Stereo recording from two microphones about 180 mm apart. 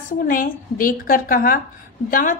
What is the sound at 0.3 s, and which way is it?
A woman's voice, 50° left (ahead or behind).